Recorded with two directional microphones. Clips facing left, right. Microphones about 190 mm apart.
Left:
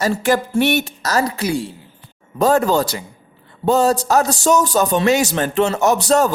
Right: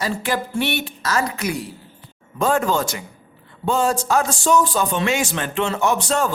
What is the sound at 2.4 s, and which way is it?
A man's voice, 40° left (ahead or behind).